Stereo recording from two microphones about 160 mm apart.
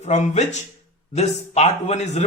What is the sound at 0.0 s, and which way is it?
A man's voice, 45° left (ahead or behind).